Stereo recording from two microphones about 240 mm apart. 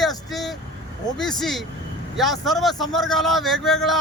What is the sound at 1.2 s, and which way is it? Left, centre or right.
A man's voice, centre.